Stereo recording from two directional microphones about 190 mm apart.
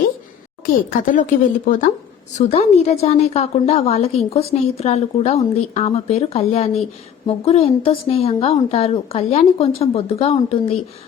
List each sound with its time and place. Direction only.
0.6 s a woman's voice: 45° left (ahead or behind)